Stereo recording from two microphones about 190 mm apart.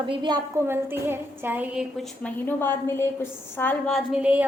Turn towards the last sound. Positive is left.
turn(degrees=-5)  # may be behind; listen again after turning